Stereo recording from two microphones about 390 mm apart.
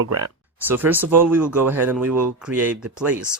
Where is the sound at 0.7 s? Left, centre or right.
Centre.